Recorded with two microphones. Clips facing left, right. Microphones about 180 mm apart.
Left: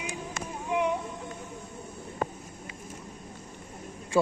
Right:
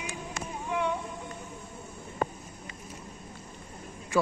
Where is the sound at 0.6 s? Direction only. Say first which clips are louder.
Left 3 dB; 15° left (ahead or behind).